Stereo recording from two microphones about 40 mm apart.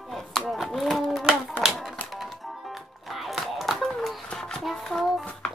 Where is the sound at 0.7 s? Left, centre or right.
Centre.